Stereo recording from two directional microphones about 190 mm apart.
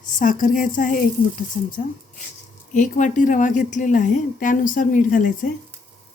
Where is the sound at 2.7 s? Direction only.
40° left (ahead or behind).